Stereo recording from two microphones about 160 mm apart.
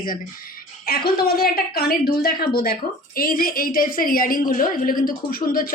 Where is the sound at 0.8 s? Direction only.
75° left (ahead or behind).